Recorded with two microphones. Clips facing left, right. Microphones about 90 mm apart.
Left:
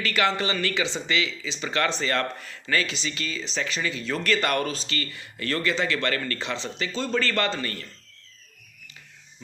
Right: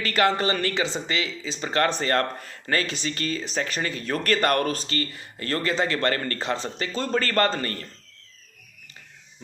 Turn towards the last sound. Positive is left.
turn(degrees=-40)  # may be behind; listen again after turning